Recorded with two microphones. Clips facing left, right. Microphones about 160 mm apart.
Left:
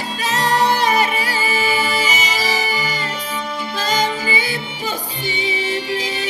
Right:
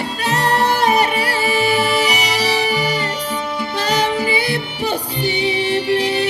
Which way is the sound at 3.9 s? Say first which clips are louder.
Right 3 dB; 70° right (ahead or behind).